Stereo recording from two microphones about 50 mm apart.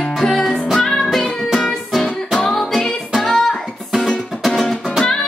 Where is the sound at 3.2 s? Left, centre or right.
Centre.